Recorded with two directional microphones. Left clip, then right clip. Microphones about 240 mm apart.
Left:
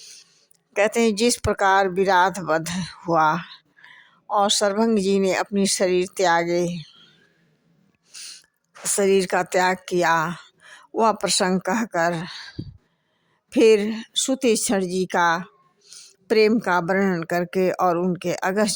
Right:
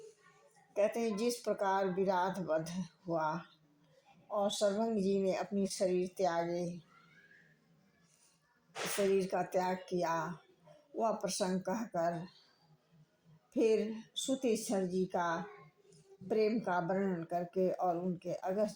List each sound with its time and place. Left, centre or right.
0.9 s speech: left
9.1 s speech: left
13.5 s speech: left
15.9 s a sound: left
16.6 s speech: left